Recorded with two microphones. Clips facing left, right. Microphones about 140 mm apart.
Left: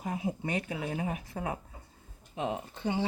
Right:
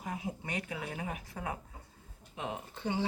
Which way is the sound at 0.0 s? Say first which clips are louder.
Left 5 dB; 30° left (ahead or behind).